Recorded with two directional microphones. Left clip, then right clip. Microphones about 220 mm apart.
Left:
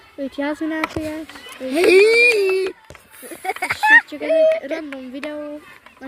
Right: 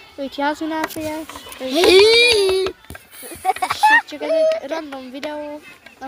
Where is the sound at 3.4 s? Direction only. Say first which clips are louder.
Right 2 dB; 35° left (ahead or behind).